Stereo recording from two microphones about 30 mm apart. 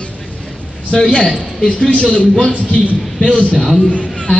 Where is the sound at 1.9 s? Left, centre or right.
Left.